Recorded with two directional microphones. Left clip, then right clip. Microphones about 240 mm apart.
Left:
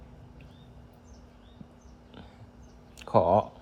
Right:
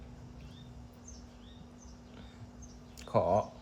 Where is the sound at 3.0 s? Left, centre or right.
Left.